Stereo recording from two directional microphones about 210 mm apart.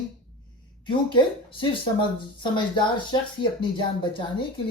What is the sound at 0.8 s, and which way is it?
A woman's voice, 20° left (ahead or behind).